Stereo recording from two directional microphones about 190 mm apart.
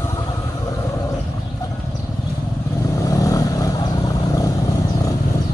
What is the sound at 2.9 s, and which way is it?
Vehicle, 15° left (ahead or behind).